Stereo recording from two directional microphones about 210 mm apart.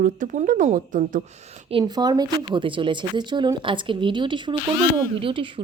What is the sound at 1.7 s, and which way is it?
Speech, 20° right (ahead or behind).